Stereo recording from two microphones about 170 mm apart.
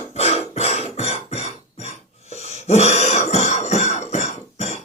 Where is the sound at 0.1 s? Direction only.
40° left (ahead or behind).